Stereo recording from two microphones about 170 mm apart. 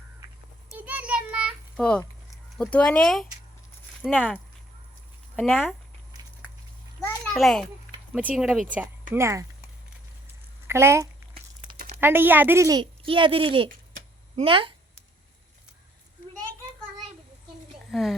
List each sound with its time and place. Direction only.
0.9 s child singing: 10° right (ahead or behind)
2.6 s speech: 5° left (ahead or behind)
5.4 s speech: centre (ahead or behind)
7.3 s speech: centre (ahead or behind); by 9.5 s 15° right (ahead or behind)
10.7 s a woman's voice: 15° right (ahead or behind); by 14.7 s 30° right (ahead or behind)
17.9 s speech: centre (ahead or behind)